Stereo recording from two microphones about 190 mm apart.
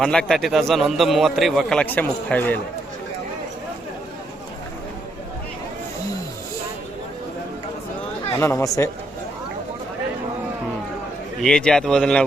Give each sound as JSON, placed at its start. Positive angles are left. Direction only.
{"t": 0.0, "sound": "a man's voice", "side_deg": 5}
{"t": 8.4, "sound": "speech", "side_deg": 15}
{"t": 11.4, "sound": "a man's voice", "side_deg": 5}